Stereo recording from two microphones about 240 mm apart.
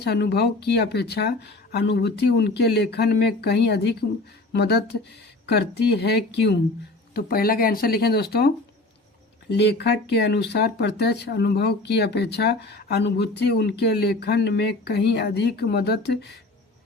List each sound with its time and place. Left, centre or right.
0.0 s speech: left